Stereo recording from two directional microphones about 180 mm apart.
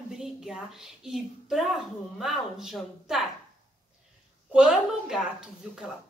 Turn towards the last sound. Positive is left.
turn(degrees=-5)  # may be behind; listen again after turning